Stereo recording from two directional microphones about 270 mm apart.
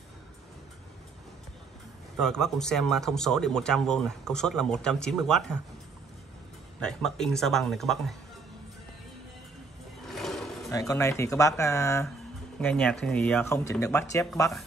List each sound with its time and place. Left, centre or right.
2.1 s speech: centre
6.8 s speech: centre
10.0 s a sound: centre
10.7 s speech: centre